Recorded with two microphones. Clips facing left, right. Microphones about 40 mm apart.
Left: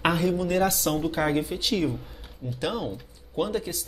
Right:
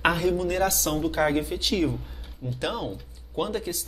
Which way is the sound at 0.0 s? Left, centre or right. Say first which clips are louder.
Right 1 dB; centre.